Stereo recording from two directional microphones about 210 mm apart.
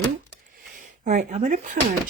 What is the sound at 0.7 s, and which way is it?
Speech, 35° right (ahead or behind).